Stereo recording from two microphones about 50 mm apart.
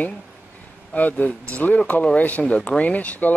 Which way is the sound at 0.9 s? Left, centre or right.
Left.